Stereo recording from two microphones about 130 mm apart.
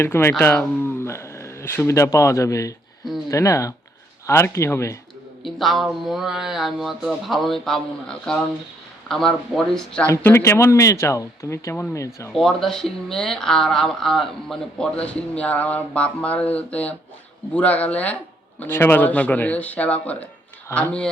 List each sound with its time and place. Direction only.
0.0 s speech: 20° left (ahead or behind)
5.4 s speech: centre (ahead or behind)
10.1 s speech: 20° left (ahead or behind)
12.3 s speech: 5° left (ahead or behind)